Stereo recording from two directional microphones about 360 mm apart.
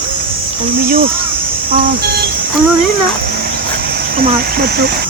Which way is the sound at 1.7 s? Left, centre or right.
Right.